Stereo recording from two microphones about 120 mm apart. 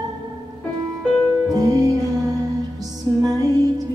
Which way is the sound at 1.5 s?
30° right (ahead or behind).